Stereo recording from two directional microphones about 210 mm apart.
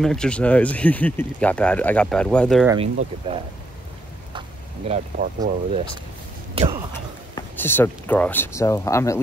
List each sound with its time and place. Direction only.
0.0 s speech: 5° left (ahead or behind)
2.8 s speech: 30° right (ahead or behind)
4.3 s a sound: 25° right (ahead or behind)
5.2 s speech: 35° right (ahead or behind)
7.3 s speech: 10° left (ahead or behind)